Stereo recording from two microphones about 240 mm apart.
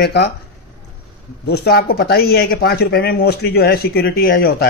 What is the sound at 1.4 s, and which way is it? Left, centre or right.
Speech, left.